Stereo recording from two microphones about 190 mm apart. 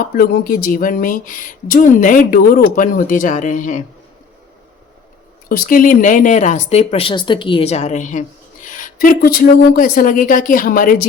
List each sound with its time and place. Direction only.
0.0 s speech: 50° left (ahead or behind)
5.5 s speech: 50° left (ahead or behind)